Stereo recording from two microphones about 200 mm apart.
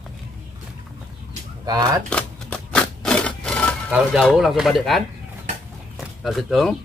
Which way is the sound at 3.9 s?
5° right (ahead or behind).